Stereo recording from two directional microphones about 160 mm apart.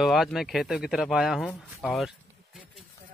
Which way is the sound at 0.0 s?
Centre (ahead or behind).